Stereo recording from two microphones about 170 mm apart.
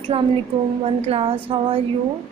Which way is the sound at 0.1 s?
35° right (ahead or behind).